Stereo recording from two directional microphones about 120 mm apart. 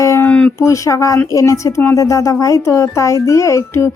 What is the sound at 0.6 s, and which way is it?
Music, 25° left (ahead or behind).